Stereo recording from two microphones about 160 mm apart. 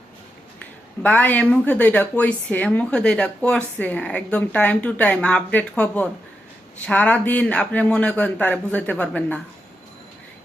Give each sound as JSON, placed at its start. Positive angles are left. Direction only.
{"t": 0.6, "sound": "speech", "side_deg": 10}